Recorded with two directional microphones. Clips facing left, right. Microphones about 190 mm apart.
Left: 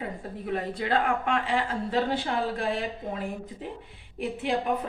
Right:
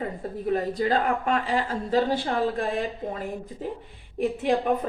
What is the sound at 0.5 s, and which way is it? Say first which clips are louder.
A woman's voice: right 3 dB; 40° right (ahead or behind).